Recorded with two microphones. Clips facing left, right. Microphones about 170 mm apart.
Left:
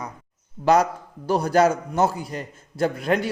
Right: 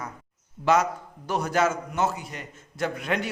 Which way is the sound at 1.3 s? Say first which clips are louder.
Left 6 dB; 35° left (ahead or behind).